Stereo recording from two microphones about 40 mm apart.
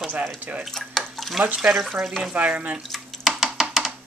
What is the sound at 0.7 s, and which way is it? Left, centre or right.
Speech, centre.